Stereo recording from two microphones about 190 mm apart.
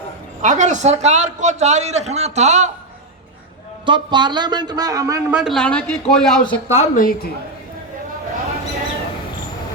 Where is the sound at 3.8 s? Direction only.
25° right (ahead or behind).